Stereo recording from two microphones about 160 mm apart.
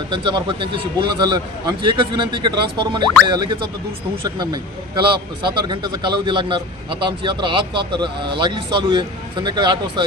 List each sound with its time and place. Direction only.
0.1 s a man's voice: 30° right (ahead or behind)